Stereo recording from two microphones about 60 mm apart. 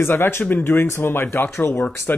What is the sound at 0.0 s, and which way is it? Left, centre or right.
Speech, left.